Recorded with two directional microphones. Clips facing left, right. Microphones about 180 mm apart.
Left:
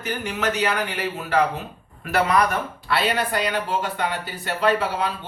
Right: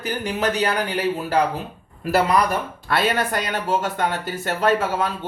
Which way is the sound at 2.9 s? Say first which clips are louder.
Right 2 dB; 50° right (ahead or behind).